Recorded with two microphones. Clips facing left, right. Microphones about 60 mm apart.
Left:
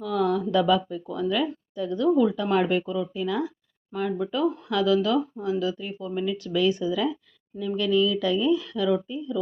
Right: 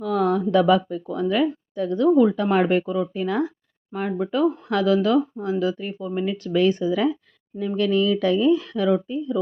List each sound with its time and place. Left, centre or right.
0.0 s speech: right
3.9 s speech: right
6.1 s speech: right
6.3 s speech: right